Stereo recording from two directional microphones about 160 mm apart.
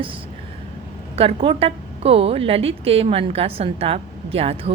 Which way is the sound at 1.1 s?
35° right (ahead or behind).